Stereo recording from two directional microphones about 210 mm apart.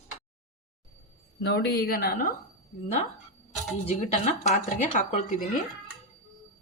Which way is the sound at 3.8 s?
30° left (ahead or behind).